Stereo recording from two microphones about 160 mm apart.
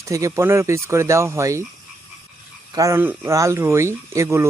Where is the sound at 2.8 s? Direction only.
15° right (ahead or behind).